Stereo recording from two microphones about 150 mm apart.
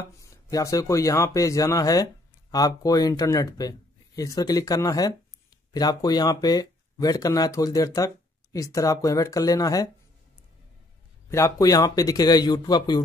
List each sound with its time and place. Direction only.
0.2 s speech: 20° left (ahead or behind)
11.2 s speech: 20° left (ahead or behind)